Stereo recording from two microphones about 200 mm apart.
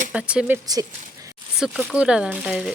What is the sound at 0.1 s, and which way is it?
Speech, 5° right (ahead or behind).